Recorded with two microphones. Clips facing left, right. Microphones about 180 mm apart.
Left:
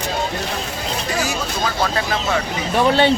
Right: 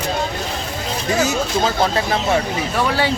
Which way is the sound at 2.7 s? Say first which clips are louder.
Left 6 dB; 25° left (ahead or behind).